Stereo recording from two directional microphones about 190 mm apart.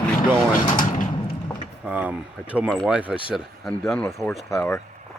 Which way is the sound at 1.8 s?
10° right (ahead or behind).